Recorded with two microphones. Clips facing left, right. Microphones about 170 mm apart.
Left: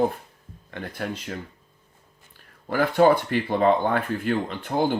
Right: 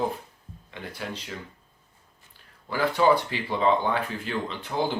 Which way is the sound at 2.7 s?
50° left (ahead or behind).